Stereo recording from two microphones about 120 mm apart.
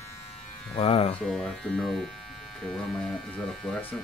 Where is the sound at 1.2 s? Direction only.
5° left (ahead or behind).